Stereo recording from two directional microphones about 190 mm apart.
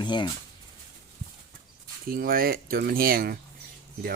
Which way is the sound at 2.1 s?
50° right (ahead or behind).